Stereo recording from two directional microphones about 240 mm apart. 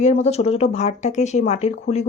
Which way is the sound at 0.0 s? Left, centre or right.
Left.